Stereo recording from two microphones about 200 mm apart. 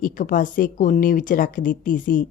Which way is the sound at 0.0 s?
45° left (ahead or behind).